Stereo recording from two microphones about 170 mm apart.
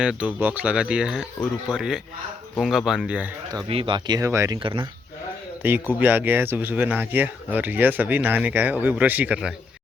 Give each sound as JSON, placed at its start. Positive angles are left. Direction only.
{"t": 0.0, "sound": "speech", "side_deg": -5}
{"t": 3.7, "sound": "speech", "side_deg": -30}
{"t": 5.6, "sound": "speech", "side_deg": -10}